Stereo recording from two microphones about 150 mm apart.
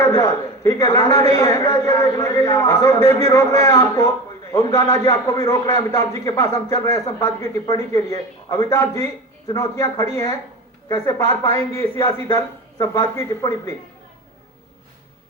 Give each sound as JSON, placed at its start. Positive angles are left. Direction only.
{"t": 0.0, "sound": "a man's voice", "side_deg": 20}